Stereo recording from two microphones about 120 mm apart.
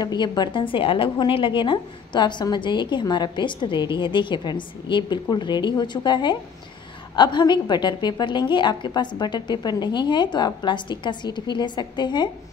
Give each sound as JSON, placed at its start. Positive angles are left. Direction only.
{"t": 0.0, "sound": "a woman's voice", "side_deg": 35}